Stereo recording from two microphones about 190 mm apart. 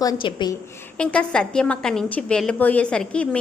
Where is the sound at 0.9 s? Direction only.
5° left (ahead or behind).